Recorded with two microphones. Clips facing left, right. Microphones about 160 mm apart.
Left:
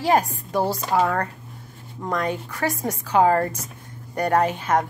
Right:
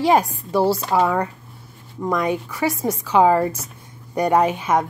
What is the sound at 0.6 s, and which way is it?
A woman's voice, 10° right (ahead or behind).